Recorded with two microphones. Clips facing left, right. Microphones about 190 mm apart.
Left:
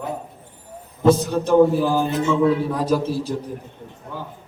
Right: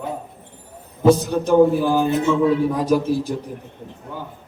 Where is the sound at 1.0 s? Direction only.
10° right (ahead or behind).